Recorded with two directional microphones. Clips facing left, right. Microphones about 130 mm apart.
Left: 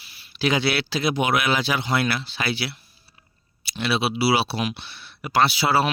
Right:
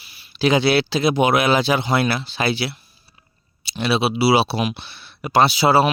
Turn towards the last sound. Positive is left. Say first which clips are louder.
# right 5 dB
turn(degrees=-25)  # may be behind; listen again after turning